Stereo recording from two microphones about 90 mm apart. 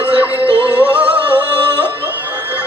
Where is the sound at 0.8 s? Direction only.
15° right (ahead or behind).